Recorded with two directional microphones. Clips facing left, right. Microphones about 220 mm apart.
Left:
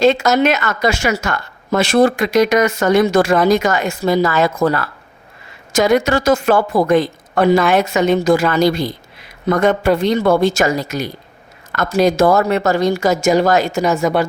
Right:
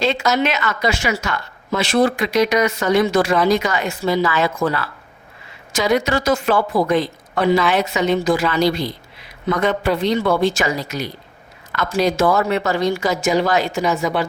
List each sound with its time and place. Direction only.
0.0 s a woman's voice: 45° left (ahead or behind)